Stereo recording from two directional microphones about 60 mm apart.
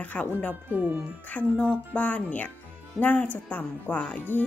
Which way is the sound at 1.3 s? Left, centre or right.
Centre.